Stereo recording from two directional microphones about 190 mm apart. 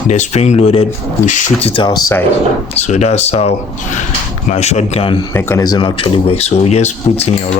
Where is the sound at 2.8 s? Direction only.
35° left (ahead or behind).